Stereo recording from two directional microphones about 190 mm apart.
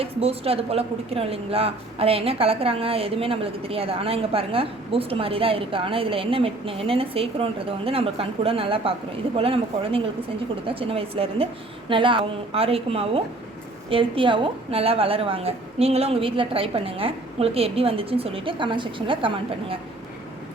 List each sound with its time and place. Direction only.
0.0 s speech: 30° right (ahead or behind)